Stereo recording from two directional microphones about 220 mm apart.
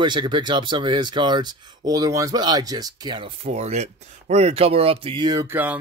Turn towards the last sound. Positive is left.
turn(degrees=-10)  # may be behind; listen again after turning